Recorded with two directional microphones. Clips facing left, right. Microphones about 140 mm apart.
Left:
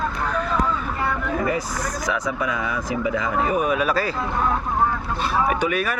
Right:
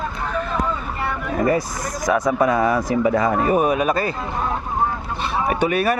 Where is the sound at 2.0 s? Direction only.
45° right (ahead or behind).